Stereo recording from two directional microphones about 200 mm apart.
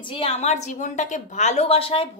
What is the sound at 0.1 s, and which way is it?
A woman's voice, 30° left (ahead or behind).